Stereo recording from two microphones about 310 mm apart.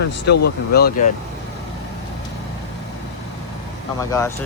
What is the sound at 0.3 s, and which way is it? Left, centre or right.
Speech, left.